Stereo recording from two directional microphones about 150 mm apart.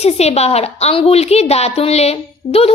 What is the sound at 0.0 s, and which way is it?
A woman's voice, 45° left (ahead or behind).